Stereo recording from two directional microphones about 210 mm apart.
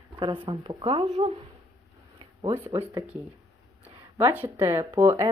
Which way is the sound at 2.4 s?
15° right (ahead or behind).